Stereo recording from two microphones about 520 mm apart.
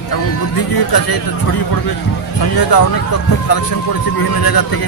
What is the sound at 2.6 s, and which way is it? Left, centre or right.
Speech, left.